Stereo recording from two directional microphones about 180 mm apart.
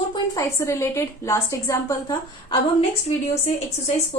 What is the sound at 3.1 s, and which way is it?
Speech, 35° left (ahead or behind).